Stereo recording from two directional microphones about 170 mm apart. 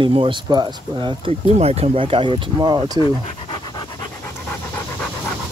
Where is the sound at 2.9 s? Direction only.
25° left (ahead or behind).